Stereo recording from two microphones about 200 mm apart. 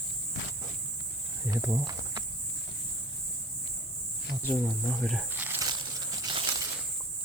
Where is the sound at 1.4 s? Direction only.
10° right (ahead or behind).